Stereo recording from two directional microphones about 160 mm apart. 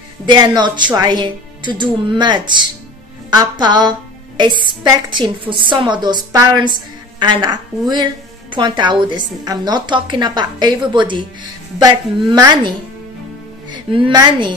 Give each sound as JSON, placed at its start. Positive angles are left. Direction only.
{"t": 0.3, "sound": "a woman's voice", "side_deg": -30}
{"t": 12.3, "sound": "a woman's voice", "side_deg": -25}